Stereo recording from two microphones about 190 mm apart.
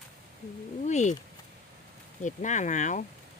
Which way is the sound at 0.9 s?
40° left (ahead or behind).